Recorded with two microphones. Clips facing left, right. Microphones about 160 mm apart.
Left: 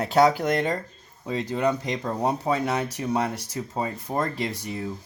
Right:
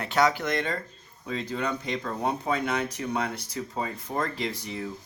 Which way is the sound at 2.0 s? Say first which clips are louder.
Left 4 dB; 30° left (ahead or behind).